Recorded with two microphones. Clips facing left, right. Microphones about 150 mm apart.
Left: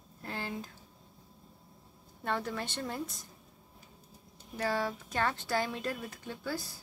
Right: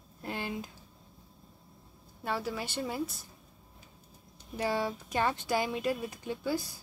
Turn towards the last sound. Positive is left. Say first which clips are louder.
# right 5 dB
turn(degrees=-15)  # may be behind; listen again after turning